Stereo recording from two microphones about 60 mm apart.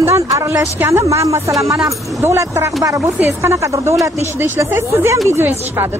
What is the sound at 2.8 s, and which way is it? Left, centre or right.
Speech, right.